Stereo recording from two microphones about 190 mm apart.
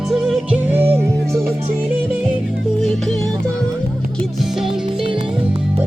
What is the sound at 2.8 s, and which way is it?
Music, centre (ahead or behind).